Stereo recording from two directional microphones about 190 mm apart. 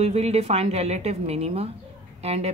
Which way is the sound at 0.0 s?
35° right (ahead or behind).